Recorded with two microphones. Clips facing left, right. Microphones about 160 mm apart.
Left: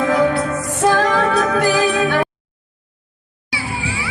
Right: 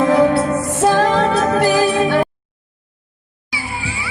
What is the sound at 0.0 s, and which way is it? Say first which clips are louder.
Music: right 3 dB; 30° right (ahead or behind).